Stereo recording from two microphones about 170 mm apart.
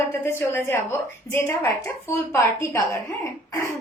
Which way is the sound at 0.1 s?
15° left (ahead or behind).